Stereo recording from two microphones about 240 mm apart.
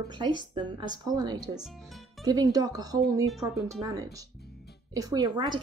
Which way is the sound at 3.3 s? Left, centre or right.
Centre.